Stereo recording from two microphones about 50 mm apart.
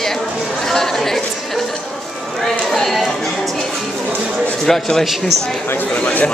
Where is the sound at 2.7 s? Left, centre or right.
Centre.